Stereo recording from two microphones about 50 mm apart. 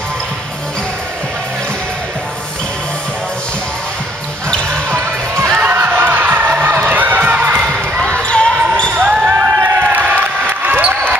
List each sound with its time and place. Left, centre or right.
5.5 s crowd: right
6.9 s a sound: right
7.3 s crowd: right
8.1 s basketball bounce: centre
9.0 s basketball bounce: right
9.6 s crowd: right
10.6 s basketball bounce: right